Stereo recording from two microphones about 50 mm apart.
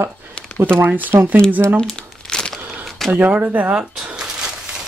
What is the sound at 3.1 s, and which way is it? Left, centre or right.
Mantra, right.